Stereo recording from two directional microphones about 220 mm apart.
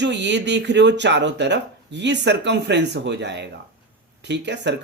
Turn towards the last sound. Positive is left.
turn(degrees=-50)  # may be behind; listen again after turning